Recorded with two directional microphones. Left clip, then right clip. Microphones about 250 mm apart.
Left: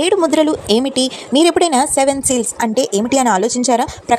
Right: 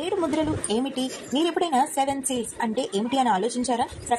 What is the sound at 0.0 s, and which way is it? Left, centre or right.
A woman's voice, left.